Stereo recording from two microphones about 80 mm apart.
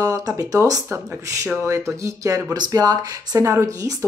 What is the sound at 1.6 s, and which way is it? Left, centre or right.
Speech, right.